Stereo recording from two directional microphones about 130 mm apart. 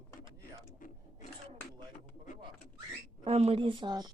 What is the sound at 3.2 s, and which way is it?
Speech, 55° right (ahead or behind).